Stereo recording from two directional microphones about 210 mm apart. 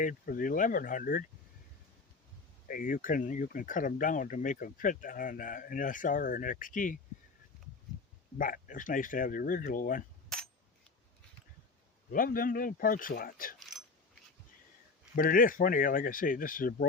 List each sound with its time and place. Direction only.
0.0 s speech: 40° left (ahead or behind)
2.6 s speech: 40° left (ahead or behind)
8.4 s speech: 40° left (ahead or behind)
12.1 s speech: 40° left (ahead or behind)
15.1 s speech: 40° left (ahead or behind)